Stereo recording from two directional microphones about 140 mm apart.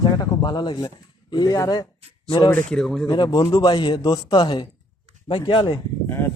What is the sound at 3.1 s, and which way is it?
Speech, 30° left (ahead or behind).